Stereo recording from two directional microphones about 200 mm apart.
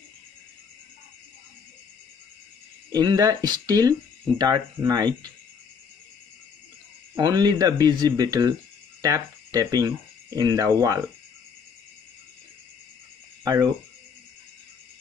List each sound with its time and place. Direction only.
2.9 s speech: 20° right (ahead or behind)
7.2 s speech: 20° right (ahead or behind)
13.4 s cricket: 20° right (ahead or behind)